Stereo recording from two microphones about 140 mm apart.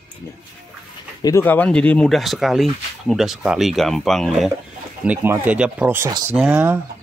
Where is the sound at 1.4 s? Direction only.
10° left (ahead or behind).